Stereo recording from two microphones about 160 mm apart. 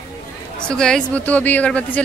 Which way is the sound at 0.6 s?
5° left (ahead or behind).